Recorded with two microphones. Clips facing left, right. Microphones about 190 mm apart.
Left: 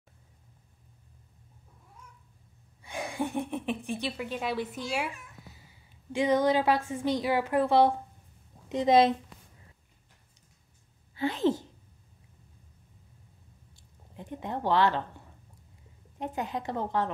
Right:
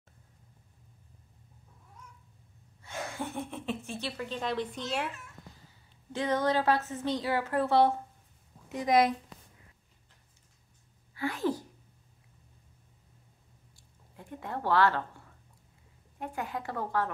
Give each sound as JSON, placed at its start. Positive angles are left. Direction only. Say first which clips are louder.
{"t": 2.8, "sound": "a woman's voice", "louder": "left 4 dB", "side_deg": 15}
{"t": 11.1, "sound": "a woman's voice", "louder": "left 4 dB", "side_deg": 25}
{"t": 14.1, "sound": "a woman's voice", "louder": "left 3 dB", "side_deg": 20}